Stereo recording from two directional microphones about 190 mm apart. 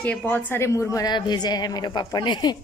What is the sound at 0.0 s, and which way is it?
A woman's voice, 10° left (ahead or behind).